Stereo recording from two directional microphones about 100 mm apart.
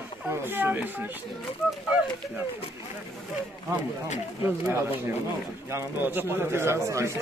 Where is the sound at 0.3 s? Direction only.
20° right (ahead or behind).